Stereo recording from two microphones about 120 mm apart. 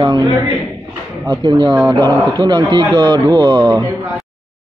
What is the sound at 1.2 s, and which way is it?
Speech, 40° right (ahead or behind).